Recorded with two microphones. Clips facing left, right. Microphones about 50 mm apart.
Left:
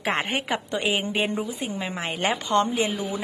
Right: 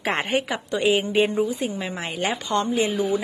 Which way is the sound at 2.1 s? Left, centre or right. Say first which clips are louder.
Left 2 dB; left.